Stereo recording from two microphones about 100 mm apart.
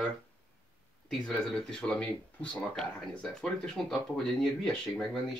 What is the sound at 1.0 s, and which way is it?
Speech, 5° left (ahead or behind).